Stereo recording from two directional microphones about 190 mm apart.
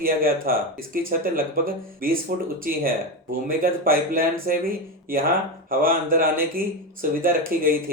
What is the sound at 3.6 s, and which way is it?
Speech, 50° right (ahead or behind).